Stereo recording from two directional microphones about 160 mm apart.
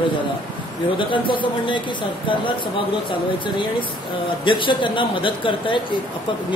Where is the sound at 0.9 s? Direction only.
30° left (ahead or behind).